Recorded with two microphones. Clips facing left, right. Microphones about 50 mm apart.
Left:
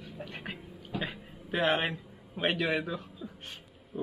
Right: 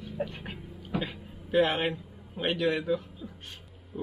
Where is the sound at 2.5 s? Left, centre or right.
Centre.